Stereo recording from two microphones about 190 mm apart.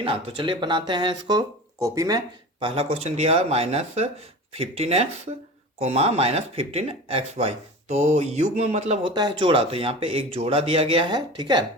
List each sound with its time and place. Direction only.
0.0 s speech: 25° right (ahead or behind)